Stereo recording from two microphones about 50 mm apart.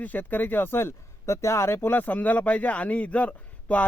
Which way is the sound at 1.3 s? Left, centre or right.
Left.